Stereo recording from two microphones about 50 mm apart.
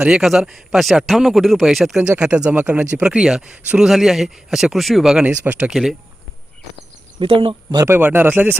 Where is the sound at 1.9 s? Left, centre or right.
Right.